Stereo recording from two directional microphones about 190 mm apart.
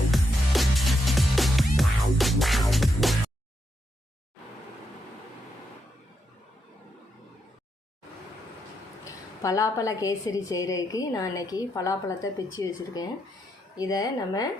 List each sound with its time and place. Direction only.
0.1 s music: centre (ahead or behind)
9.0 s a woman's voice: 15° left (ahead or behind)